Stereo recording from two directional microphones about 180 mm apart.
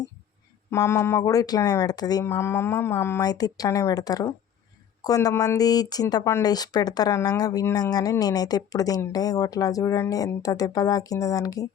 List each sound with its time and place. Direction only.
0.7 s speech: 15° left (ahead or behind)